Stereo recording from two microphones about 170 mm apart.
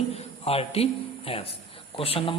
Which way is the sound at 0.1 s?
35° left (ahead or behind).